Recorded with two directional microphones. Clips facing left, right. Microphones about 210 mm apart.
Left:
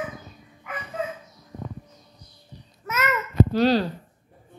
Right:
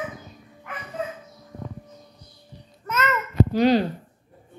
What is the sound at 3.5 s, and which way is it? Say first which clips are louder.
Speech: right 3 dB; 15° right (ahead or behind).